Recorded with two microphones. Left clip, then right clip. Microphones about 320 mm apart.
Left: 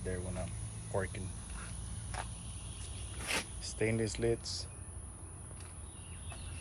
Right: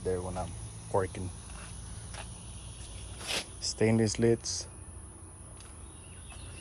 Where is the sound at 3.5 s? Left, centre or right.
Right.